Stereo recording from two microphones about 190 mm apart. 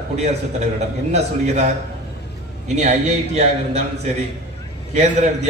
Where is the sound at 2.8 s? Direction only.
35° right (ahead or behind).